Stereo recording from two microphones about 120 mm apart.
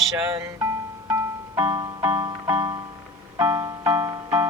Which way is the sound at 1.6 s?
35° right (ahead or behind).